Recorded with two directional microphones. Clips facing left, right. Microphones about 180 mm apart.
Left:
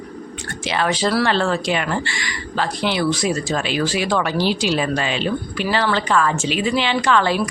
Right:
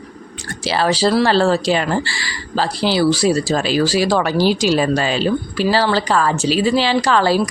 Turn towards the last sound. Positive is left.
turn(degrees=-35)  # may be behind; listen again after turning